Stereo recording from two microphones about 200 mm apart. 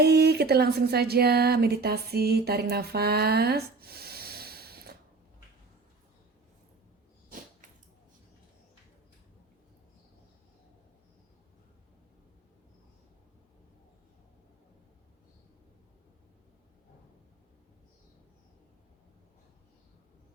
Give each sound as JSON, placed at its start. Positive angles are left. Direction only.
{"t": 0.0, "sound": "speech", "side_deg": -55}